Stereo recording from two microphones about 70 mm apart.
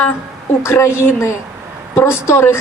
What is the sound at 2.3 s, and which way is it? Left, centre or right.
Speech, left.